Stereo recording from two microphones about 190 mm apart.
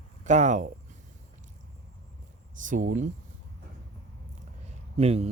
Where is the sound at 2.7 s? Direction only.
45° right (ahead or behind).